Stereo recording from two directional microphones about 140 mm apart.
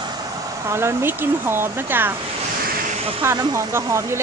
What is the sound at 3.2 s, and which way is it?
Speech, 20° right (ahead or behind).